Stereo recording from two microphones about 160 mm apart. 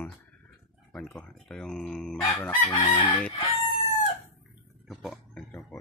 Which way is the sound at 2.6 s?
30° left (ahead or behind).